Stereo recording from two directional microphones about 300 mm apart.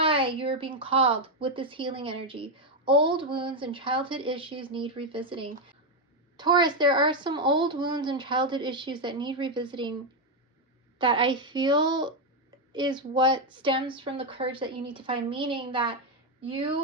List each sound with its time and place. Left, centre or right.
0.0 s speech: centre